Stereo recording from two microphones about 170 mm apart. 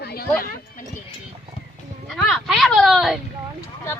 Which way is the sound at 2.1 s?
Centre (ahead or behind).